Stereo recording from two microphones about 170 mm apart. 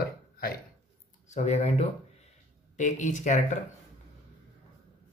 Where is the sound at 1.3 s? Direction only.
40° left (ahead or behind).